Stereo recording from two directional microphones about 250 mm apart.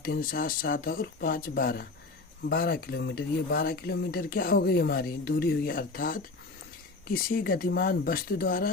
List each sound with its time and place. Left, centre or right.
0.2 s dishes: left